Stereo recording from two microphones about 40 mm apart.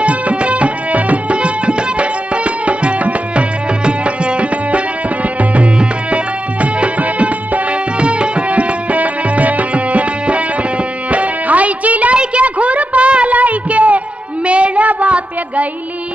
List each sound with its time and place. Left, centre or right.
0.0 s tabla: right
3.8 s music: right
12.2 s a sound: right